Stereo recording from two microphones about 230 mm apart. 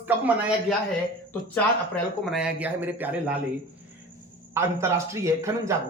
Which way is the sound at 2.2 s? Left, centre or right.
Centre.